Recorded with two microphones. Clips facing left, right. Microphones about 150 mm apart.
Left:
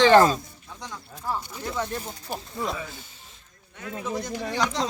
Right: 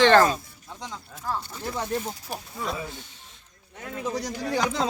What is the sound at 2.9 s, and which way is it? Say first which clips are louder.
Snake: right 2 dB; 5° left (ahead or behind).